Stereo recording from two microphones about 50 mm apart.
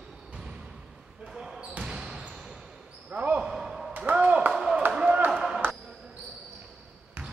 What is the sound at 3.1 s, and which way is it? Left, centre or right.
Basketball bounce, right.